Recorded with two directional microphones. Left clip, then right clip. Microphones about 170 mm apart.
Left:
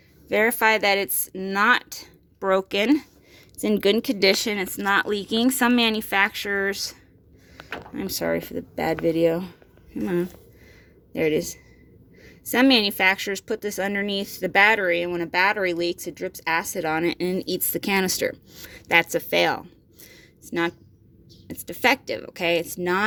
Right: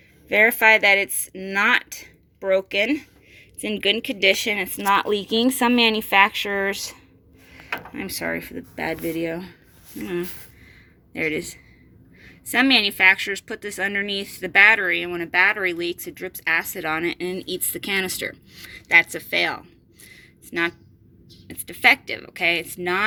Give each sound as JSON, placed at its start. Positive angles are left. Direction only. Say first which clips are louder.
{"t": 0.3, "sound": "speech", "louder": "right 4 dB", "side_deg": 15}
{"t": 2.6, "sound": "a woman's voice", "louder": "even", "side_deg": 40}
{"t": 4.9, "sound": "speech", "louder": "right 2 dB", "side_deg": 15}
{"t": 7.9, "sound": "a woman's voice", "louder": "left 4 dB", "side_deg": 25}
{"t": 20.1, "sound": "a sound", "louder": "left 2 dB", "side_deg": 35}
{"t": 21.4, "sound": "a woman's voice", "louder": "right 4 dB", "side_deg": 40}